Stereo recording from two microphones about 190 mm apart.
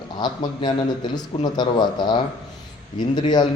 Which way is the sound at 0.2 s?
25° left (ahead or behind).